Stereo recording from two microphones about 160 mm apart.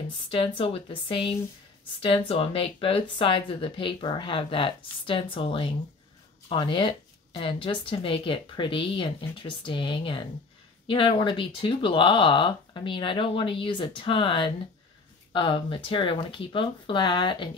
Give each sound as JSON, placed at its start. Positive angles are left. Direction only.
{"t": 0.3, "sound": "speech", "side_deg": 35}